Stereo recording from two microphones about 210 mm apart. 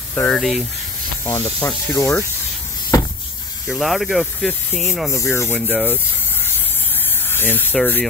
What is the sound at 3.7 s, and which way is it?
Speech, centre (ahead or behind).